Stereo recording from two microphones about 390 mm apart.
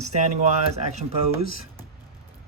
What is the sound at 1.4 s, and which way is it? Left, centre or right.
Speech, right.